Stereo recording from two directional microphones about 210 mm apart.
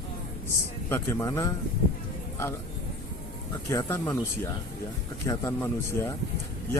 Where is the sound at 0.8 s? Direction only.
10° left (ahead or behind).